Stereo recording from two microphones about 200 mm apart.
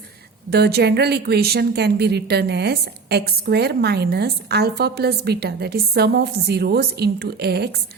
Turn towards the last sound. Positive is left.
turn(degrees=-55)  # may be behind; listen again after turning